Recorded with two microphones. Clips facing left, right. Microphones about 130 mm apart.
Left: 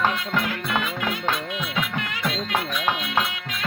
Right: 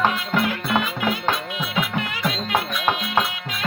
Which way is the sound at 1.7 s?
25° right (ahead or behind).